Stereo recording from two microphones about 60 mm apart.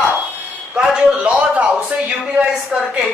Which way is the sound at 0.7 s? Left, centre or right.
Centre.